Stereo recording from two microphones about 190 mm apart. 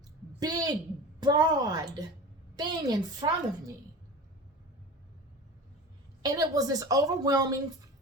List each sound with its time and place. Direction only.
0.3 s a woman's voice: 20° right (ahead or behind)
6.2 s a woman's voice: 20° right (ahead or behind)